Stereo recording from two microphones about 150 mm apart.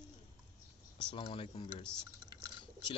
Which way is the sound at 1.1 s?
35° left (ahead or behind).